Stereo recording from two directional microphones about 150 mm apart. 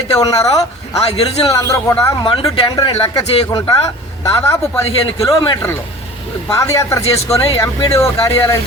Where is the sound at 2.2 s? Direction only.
35° left (ahead or behind); by 8.6 s 20° left (ahead or behind).